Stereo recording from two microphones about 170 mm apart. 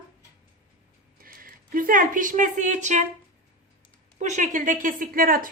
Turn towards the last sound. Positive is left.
turn(degrees=-55)  # may be behind; listen again after turning